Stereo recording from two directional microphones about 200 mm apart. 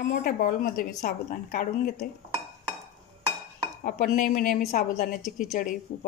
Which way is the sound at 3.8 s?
40° left (ahead or behind).